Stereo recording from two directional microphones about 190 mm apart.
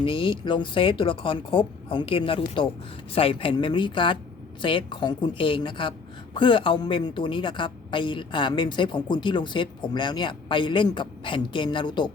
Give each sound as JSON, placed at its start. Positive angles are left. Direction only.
{"t": 0.0, "sound": "a woman's voice", "side_deg": 25}